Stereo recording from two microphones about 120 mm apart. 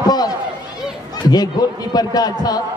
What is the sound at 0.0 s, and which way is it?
Run, 35° left (ahead or behind).